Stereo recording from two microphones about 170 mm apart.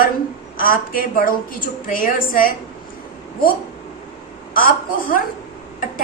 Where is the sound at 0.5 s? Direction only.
55° left (ahead or behind).